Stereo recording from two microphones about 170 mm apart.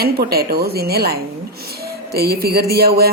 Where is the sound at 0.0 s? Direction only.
65° right (ahead or behind).